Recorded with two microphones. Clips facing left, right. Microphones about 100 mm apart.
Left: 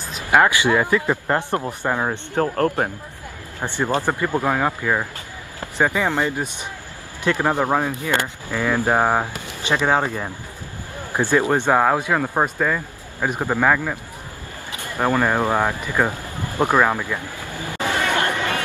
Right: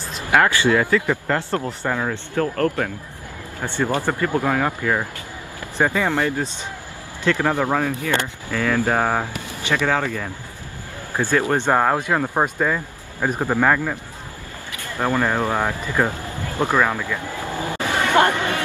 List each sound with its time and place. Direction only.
0.3 s a man's voice: 20° left (ahead or behind)
2.0 s a man's voice: 35° left (ahead or behind)
3.6 s speech: 15° left (ahead or behind)
11.7 s speech: 5° left (ahead or behind)
13.2 s speech: 10° left (ahead or behind)
14.8 s speech: 15° left (ahead or behind)
17.5 s a sound: 20° right (ahead or behind)
17.8 s chatter: 20° right (ahead or behind)